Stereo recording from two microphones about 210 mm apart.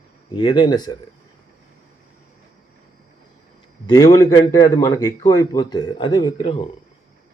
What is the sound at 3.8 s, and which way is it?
A man's voice, 20° left (ahead or behind).